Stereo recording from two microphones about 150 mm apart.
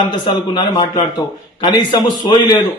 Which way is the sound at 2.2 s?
35° left (ahead or behind).